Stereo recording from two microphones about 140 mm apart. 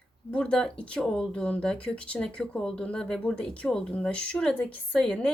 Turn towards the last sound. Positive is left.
turn(degrees=5)  # may be behind; listen again after turning